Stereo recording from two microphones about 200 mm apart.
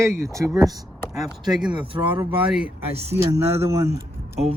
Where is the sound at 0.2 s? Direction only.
15° right (ahead or behind).